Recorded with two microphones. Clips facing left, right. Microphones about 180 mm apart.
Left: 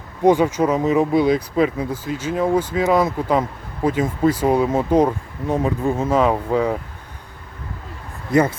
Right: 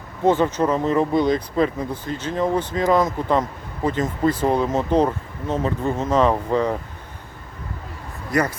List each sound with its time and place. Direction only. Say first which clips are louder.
0.3 s speech: left 3 dB; 10° left (ahead or behind)
8.3 s speech: left 5 dB; 25° left (ahead or behind)